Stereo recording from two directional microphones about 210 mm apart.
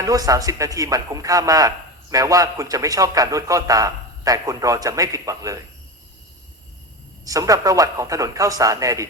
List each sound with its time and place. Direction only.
0.0 s speech: 15° right (ahead or behind)
7.3 s speech: 15° right (ahead or behind)